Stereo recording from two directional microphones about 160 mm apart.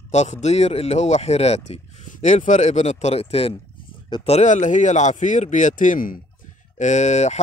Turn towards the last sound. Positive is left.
turn(degrees=45)  # may be behind; listen again after turning